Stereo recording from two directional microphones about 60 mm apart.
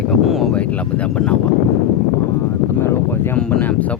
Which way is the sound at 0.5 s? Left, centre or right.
Left.